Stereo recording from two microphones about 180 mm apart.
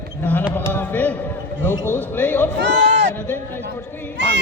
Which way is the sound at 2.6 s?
75° right (ahead or behind).